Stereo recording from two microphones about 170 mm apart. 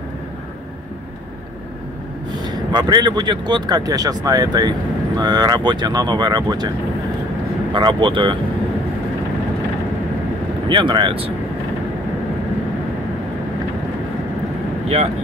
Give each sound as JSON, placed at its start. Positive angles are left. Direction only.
{"t": 2.4, "sound": "speech", "side_deg": -25}
{"t": 7.7, "sound": "speech", "side_deg": -30}
{"t": 10.7, "sound": "speech", "side_deg": -30}